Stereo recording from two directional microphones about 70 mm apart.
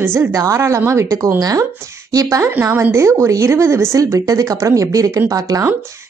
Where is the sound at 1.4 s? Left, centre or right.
Right.